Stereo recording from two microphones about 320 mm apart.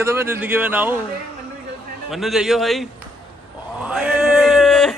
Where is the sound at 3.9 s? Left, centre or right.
Centre.